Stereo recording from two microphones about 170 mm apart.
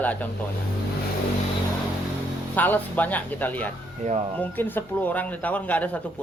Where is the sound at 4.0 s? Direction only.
40° right (ahead or behind).